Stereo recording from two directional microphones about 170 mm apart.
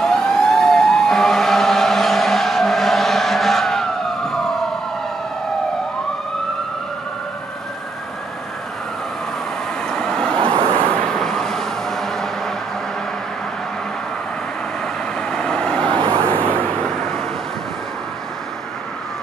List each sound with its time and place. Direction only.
0.0 s emergency vehicle: 5° left (ahead or behind)
9.8 s vehicle: 5° left (ahead or behind)
10.4 s vehicle: 30° right (ahead or behind)
11.1 s vehicle: 5° left (ahead or behind)
15.1 s vehicle: 5° left (ahead or behind)
15.9 s vehicle: 30° right (ahead or behind)
16.3 s vehicle: 10° left (ahead or behind)